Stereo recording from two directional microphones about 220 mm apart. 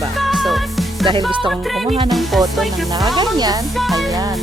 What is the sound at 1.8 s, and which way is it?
Music, 25° right (ahead or behind).